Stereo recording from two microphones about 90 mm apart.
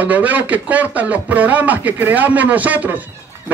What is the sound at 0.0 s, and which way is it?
A man's voice, 15° right (ahead or behind).